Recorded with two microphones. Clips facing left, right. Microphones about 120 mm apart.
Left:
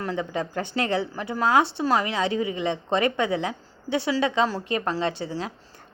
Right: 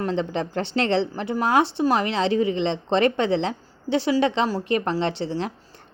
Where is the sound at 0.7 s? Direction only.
25° right (ahead or behind).